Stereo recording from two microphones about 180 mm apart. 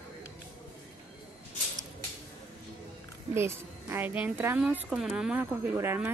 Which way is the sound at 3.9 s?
10° right (ahead or behind).